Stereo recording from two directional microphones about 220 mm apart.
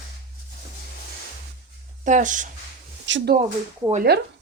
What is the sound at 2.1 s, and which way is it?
Speech, 35° right (ahead or behind).